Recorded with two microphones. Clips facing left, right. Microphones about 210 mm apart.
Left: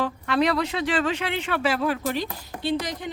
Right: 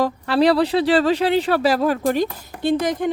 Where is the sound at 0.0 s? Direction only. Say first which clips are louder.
Right 6 dB; 35° right (ahead or behind).